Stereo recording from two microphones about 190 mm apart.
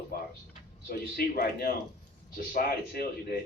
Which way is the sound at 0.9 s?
55° left (ahead or behind).